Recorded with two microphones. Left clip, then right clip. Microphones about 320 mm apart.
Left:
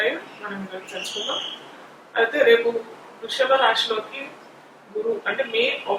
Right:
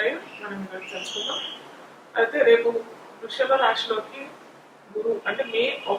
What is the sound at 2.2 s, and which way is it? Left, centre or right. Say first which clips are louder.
Speech: left 1 dB; centre.